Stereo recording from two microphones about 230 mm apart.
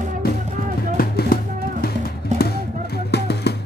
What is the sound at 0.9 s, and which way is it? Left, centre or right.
Music, left.